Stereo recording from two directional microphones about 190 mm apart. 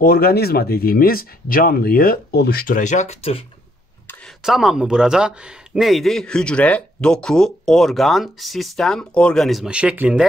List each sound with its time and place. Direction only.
0.0 s speech: 50° left (ahead or behind); by 3.4 s 30° left (ahead or behind)
4.4 s a man's voice: centre (ahead or behind)